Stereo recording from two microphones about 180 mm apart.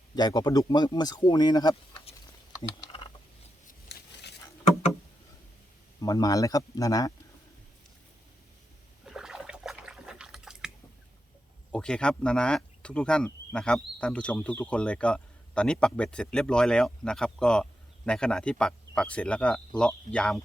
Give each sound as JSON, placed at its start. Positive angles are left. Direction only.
{"t": 0.2, "sound": "speech", "side_deg": 20}
{"t": 2.6, "sound": "a sound", "side_deg": 30}
{"t": 3.8, "sound": "a sound", "side_deg": 65}
{"t": 6.0, "sound": "speech", "side_deg": 20}
{"t": 9.0, "sound": "water", "side_deg": -5}
{"t": 11.7, "sound": "speech", "side_deg": 5}